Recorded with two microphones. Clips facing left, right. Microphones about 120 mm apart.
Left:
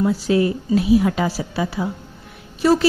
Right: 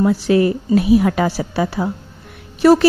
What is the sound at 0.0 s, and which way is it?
A woman's voice, 60° right (ahead or behind).